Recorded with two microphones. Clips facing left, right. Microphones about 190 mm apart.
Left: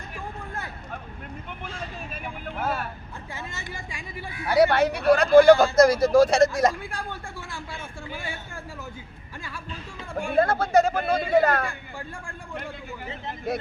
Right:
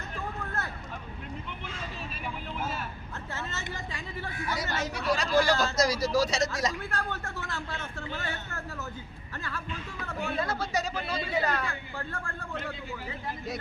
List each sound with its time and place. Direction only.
2.5 s vehicle: 60° left (ahead or behind)
3.7 s vehicle: 10° left (ahead or behind)
4.4 s speech: 65° left (ahead or behind)
6.9 s a sound: 10° left (ahead or behind)
10.3 s speech: 55° left (ahead or behind)
11.7 s a man's voice: 10° left (ahead or behind)
13.5 s speech: 55° left (ahead or behind)